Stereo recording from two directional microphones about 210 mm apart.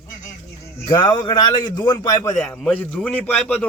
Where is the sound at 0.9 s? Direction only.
20° left (ahead or behind).